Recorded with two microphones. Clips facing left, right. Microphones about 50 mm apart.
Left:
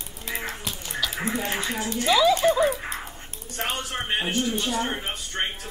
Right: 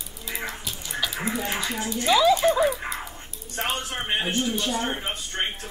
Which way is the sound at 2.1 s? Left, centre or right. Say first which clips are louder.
Right 1 dB; centre.